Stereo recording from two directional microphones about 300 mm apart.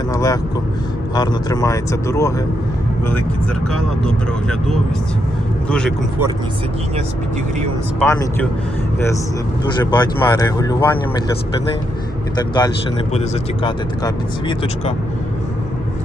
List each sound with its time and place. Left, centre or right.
0.1 s speech: centre
3.7 s speech: centre
8.0 s speech: centre
9.6 s speech: centre
13.1 s speech: centre